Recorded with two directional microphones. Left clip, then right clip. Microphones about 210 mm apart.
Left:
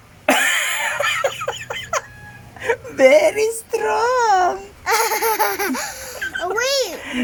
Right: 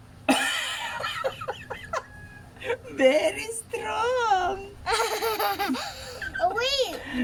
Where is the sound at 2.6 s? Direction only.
25° left (ahead or behind).